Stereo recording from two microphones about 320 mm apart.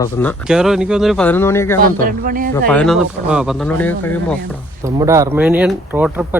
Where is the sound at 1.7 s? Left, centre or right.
Right.